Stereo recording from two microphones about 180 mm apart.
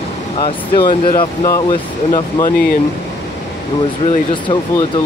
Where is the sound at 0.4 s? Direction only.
25° left (ahead or behind).